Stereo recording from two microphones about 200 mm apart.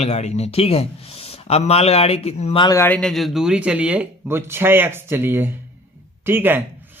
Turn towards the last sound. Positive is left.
turn(degrees=-10)  # may be behind; listen again after turning